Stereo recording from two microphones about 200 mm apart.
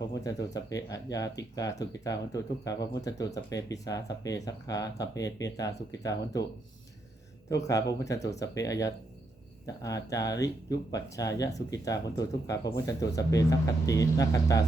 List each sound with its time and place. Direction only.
0.0 s speech: 15° left (ahead or behind)
7.9 s speech: 15° left (ahead or behind)